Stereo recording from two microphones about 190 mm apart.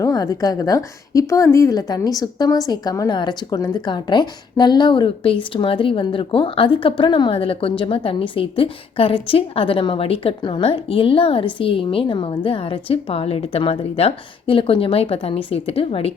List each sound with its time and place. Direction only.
0.0 s a woman's voice: 20° left (ahead or behind)